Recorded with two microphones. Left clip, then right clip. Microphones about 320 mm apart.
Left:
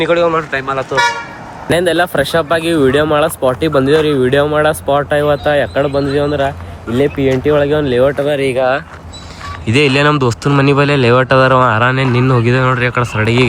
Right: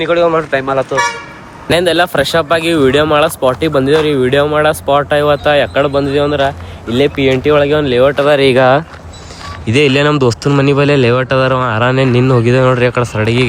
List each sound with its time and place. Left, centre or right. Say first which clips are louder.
0.0 s speech: right 1 dB; centre
8.3 s speech: right 5 dB; right
9.6 s speech: right 1 dB; centre